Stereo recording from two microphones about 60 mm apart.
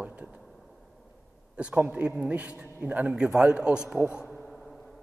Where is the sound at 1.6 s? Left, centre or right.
Centre.